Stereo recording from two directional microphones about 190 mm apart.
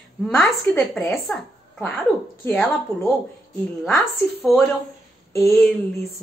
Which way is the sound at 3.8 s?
Centre (ahead or behind).